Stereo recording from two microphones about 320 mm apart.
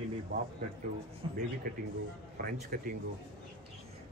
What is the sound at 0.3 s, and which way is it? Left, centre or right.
Speech, right.